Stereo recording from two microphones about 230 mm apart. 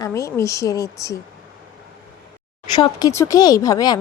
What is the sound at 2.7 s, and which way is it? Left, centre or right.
Speech, centre.